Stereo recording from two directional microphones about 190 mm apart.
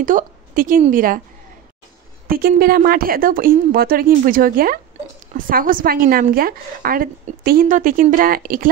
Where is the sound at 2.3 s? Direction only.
50° right (ahead or behind).